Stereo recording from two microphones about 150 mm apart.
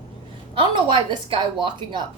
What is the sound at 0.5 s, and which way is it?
A woman's voice, 35° right (ahead or behind).